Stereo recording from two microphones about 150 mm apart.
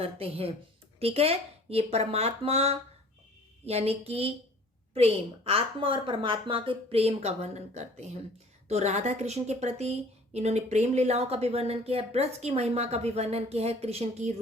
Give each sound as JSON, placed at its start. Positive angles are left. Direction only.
{"t": 0.0, "sound": "a woman's voice", "side_deg": -40}